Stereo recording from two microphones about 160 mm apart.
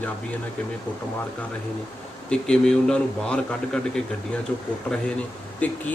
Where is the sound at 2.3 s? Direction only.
5° left (ahead or behind).